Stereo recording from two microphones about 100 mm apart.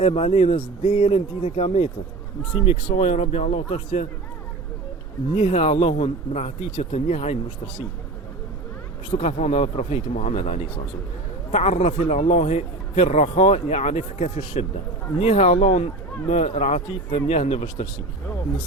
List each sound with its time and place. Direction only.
0.0 s a man's voice: 75° left (ahead or behind)
5.3 s a man's voice: 90° left
9.1 s a man's voice: 90° left